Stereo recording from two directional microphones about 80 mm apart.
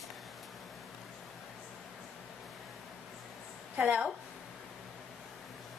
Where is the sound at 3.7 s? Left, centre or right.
Centre.